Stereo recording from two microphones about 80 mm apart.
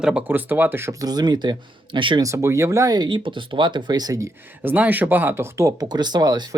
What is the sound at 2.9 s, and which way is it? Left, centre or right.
Speech, right.